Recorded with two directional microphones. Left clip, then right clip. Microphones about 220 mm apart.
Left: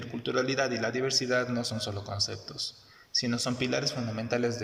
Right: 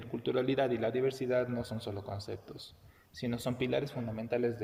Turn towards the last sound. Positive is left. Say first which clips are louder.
# left 3 dB
turn(degrees=-10)  # may be behind; listen again after turning